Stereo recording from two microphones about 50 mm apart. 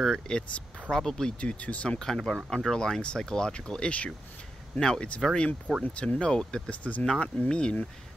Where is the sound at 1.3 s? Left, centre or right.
Left.